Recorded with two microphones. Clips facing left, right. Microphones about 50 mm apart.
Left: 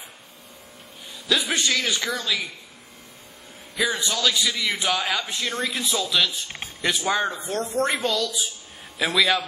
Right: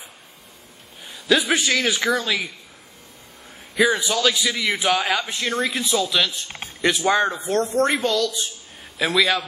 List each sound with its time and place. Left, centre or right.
1.0 s a sound: centre
1.7 s speech: centre
3.7 s a man's voice: centre